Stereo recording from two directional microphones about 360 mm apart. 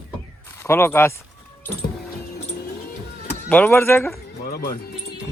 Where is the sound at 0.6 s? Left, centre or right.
Centre.